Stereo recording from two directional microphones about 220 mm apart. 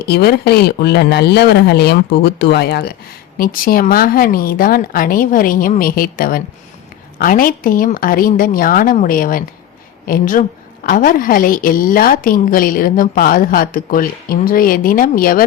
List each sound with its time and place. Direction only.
0.1 s a woman's voice: 45° left (ahead or behind)